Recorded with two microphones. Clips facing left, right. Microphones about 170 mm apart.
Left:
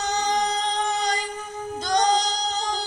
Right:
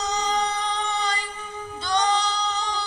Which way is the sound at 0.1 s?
40° left (ahead or behind).